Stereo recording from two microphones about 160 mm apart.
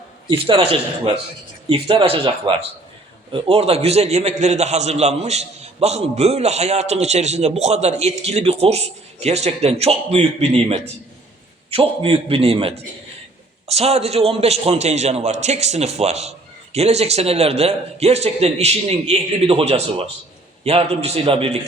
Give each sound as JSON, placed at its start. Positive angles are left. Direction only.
{"t": 0.3, "sound": "a man's voice", "side_deg": -35}